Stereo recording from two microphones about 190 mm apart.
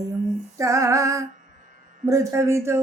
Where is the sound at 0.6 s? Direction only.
15° right (ahead or behind).